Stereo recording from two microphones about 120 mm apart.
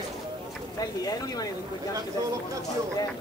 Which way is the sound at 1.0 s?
30° left (ahead or behind).